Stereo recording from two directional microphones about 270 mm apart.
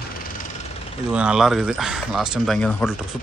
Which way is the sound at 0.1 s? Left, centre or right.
Left.